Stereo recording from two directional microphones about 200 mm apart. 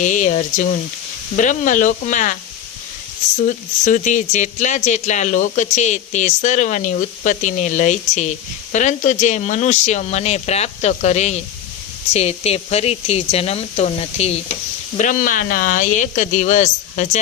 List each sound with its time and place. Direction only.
0.0 s speech: 40° left (ahead or behind)
3.4 s speech: 40° left (ahead or behind)